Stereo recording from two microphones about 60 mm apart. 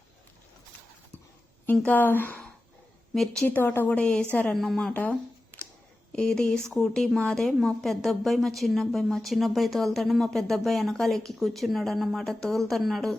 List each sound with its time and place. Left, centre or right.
1.7 s speech: left
3.4 s speech: left
3.8 s speech: centre
4.3 s a woman's voice: left
4.5 s a woman's voice: centre
6.1 s a woman's voice: centre